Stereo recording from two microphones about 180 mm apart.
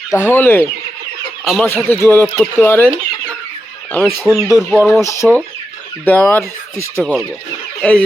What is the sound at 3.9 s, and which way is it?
Speech, 10° left (ahead or behind).